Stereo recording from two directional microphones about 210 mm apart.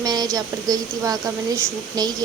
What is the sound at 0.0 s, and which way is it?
A woman's voice, 20° right (ahead or behind).